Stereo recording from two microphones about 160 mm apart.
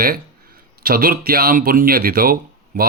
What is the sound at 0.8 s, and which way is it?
Speech, 65° right (ahead or behind).